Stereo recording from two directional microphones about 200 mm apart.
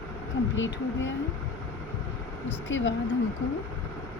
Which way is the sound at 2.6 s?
70° left (ahead or behind).